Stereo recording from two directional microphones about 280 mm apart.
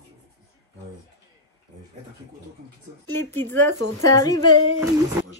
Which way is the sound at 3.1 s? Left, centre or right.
Centre.